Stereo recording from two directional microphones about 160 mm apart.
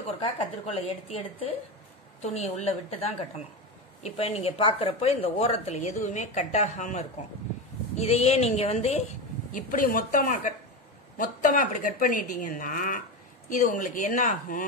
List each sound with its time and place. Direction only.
0.2 s speech: 35° left (ahead or behind)
2.2 s a woman's voice: 45° left (ahead or behind)
9.5 s a woman's voice: 55° left (ahead or behind)